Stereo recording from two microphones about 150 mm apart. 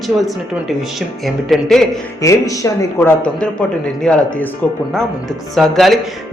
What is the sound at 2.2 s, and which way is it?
Speech, 20° left (ahead or behind).